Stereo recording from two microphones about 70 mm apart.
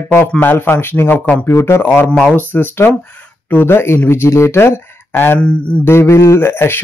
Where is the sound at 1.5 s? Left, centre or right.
Left.